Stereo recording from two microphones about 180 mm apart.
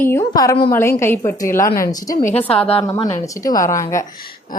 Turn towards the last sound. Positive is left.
turn(degrees=15)  # may be behind; listen again after turning